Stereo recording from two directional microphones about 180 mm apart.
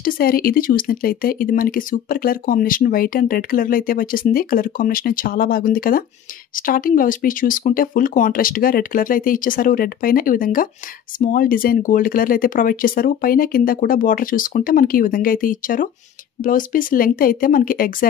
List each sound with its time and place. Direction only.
0.0 s speech: 55° left (ahead or behind)